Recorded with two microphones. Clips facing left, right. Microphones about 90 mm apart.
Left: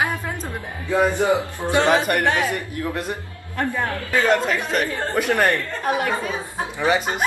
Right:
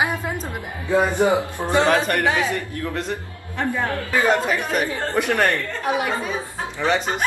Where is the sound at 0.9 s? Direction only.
20° right (ahead or behind).